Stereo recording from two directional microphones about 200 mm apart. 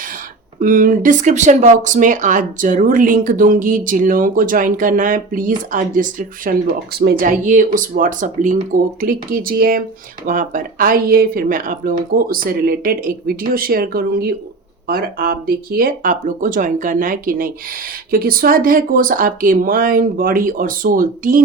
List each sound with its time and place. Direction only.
0.6 s speech: 45° right (ahead or behind)